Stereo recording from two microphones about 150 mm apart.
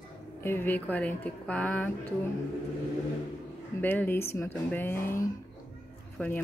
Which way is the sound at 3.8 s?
15° left (ahead or behind).